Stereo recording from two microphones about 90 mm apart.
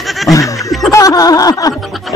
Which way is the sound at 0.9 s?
40° left (ahead or behind).